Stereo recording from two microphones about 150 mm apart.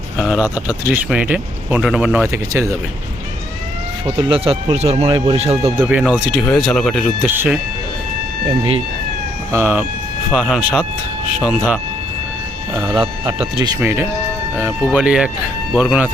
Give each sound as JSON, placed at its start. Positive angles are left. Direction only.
{"t": 0.2, "sound": "speech", "side_deg": -5}
{"t": 2.2, "sound": "speech", "side_deg": -20}
{"t": 4.0, "sound": "speech", "side_deg": -40}
{"t": 5.0, "sound": "speech", "side_deg": -30}
{"t": 5.7, "sound": "speech", "side_deg": -10}
{"t": 6.5, "sound": "speech", "side_deg": 5}
{"t": 7.3, "sound": "speech", "side_deg": -10}
{"t": 8.4, "sound": "speech", "side_deg": -40}
{"t": 9.5, "sound": "speech", "side_deg": -15}
{"t": 12.7, "sound": "speech", "side_deg": -20}
{"t": 13.0, "sound": "speech", "side_deg": -35}
{"t": 13.6, "sound": "speech", "side_deg": -20}